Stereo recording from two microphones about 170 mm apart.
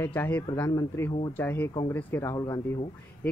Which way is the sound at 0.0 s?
10° left (ahead or behind).